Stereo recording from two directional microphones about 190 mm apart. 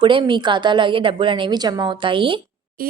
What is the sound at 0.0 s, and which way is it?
Speech, 25° right (ahead or behind).